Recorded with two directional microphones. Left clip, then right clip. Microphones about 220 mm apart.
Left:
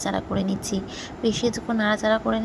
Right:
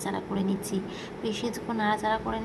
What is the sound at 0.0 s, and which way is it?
A woman's voice, 15° left (ahead or behind).